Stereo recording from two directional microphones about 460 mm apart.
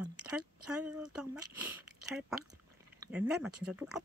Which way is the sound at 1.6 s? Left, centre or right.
Right.